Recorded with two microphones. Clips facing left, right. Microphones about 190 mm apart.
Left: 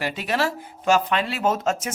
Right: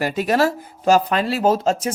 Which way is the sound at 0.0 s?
40° right (ahead or behind).